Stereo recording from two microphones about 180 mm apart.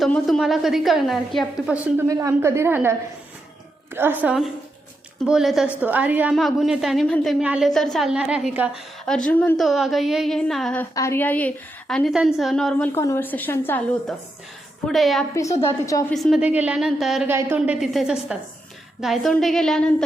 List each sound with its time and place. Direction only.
0.0 s a woman's voice: centre (ahead or behind)
2.0 s a woman's voice: 20° right (ahead or behind)
3.9 s a woman's voice: 10° right (ahead or behind)
9.0 s a woman's voice: 5° left (ahead or behind)
10.9 s a woman's voice: 15° left (ahead or behind)
14.8 s a woman's voice: centre (ahead or behind)
15.4 s a woman's voice: 20° left (ahead or behind)
16.1 s a woman's voice: centre (ahead or behind)
17.2 s a woman's voice: 10° right (ahead or behind); by 20.1 s 5° left (ahead or behind)